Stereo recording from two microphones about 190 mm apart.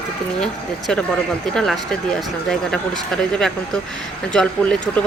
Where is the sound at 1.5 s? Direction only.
Centre (ahead or behind).